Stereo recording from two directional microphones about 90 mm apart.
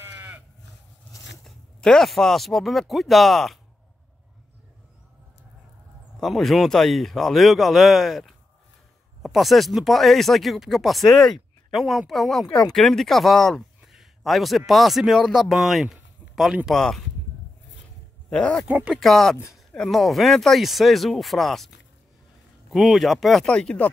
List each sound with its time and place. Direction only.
0.0 s sheep: 20° right (ahead or behind)
1.4 s speech: 5° left (ahead or behind)
6.1 s speech: centre (ahead or behind)
18.3 s speech: 10° left (ahead or behind)